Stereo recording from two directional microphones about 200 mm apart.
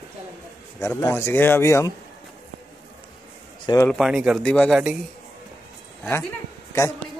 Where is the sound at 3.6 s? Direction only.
15° left (ahead or behind).